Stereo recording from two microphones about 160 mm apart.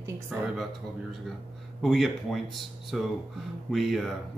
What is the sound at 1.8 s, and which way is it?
Speech, centre (ahead or behind).